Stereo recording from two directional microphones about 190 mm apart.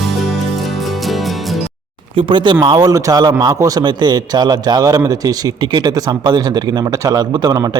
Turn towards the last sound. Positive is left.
turn(degrees=-20)  # may be behind; listen again after turning